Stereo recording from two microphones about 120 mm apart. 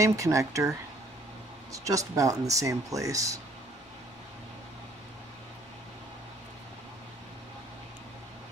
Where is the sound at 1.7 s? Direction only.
25° right (ahead or behind).